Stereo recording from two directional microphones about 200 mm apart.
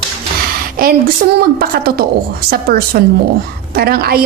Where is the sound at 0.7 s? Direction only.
50° right (ahead or behind).